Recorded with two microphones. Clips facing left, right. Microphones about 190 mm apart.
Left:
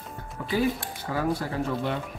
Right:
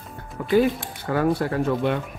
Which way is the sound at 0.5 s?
60° right (ahead or behind).